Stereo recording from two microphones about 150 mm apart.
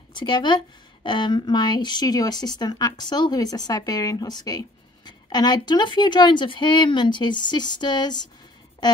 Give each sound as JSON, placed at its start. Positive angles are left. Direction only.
{"t": 0.1, "sound": "a woman's voice", "side_deg": 30}